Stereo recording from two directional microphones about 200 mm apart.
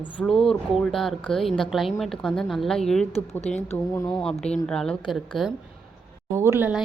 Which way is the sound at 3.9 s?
20° left (ahead or behind).